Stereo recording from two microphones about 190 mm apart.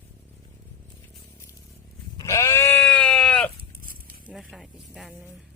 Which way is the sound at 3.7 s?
50° right (ahead or behind).